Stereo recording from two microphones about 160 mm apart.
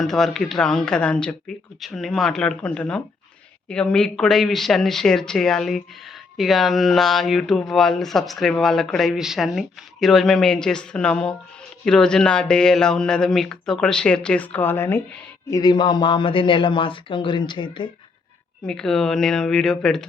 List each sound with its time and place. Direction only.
0.0 s a man's voice: 5° left (ahead or behind); by 17.9 s 30° left (ahead or behind)
18.6 s speech: 5° left (ahead or behind)